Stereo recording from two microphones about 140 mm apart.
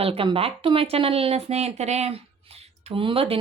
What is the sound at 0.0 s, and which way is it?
Speech, 40° right (ahead or behind).